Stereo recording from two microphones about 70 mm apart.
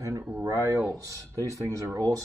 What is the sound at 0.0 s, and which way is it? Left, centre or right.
Speech, right.